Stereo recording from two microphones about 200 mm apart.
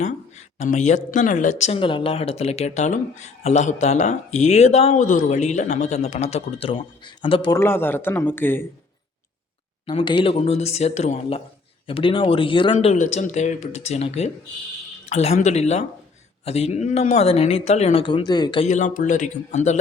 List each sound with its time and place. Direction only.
0.0 s speech: 35° left (ahead or behind)
7.6 s speech: 10° left (ahead or behind)
9.8 s speech: 25° left (ahead or behind)
18.7 s speech: 40° left (ahead or behind)